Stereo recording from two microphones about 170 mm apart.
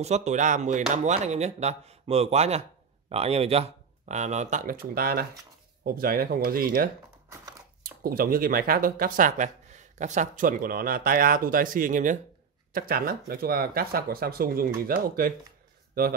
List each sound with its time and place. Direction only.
0.0 s speech: 40° right (ahead or behind); by 16.2 s 60° right (ahead or behind)